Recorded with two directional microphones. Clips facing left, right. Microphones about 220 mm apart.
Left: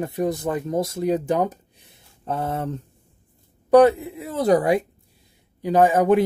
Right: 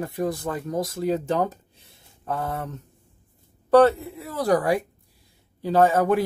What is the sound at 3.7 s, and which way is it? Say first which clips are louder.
Speech: left 2 dB; 15° left (ahead or behind).